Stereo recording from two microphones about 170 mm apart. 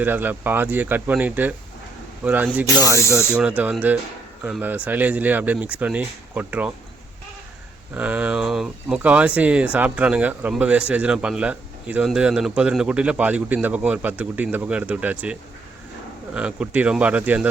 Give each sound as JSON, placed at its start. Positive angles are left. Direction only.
{"t": 0.0, "sound": "speech", "side_deg": -10}
{"t": 3.0, "sound": "speech", "side_deg": 15}
{"t": 3.3, "sound": "speech", "side_deg": -10}
{"t": 7.9, "sound": "speech", "side_deg": -10}